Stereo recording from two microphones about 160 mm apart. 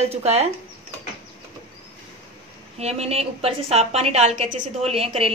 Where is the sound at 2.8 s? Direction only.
40° right (ahead or behind).